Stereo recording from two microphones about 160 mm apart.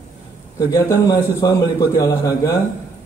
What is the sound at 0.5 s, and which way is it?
A man's voice, 20° left (ahead or behind).